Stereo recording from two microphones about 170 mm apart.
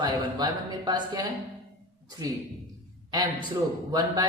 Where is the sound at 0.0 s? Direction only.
25° right (ahead or behind).